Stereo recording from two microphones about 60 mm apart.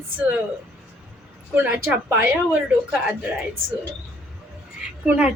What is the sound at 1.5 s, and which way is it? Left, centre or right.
Speech, right.